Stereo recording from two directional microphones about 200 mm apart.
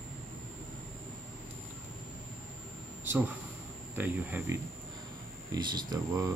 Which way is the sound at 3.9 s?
10° right (ahead or behind).